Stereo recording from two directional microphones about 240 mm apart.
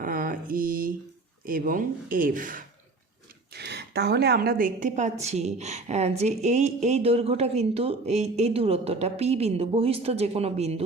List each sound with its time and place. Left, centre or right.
0.0 s mantra: right
1.5 s a woman's voice: right